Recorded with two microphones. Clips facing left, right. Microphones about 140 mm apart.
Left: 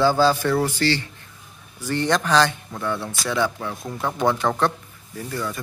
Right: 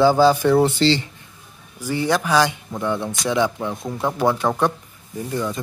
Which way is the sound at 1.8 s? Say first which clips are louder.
Right 1 dB; 10° right (ahead or behind).